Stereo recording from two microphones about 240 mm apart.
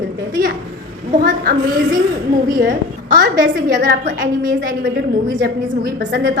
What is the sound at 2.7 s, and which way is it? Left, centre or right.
A woman's voice, right.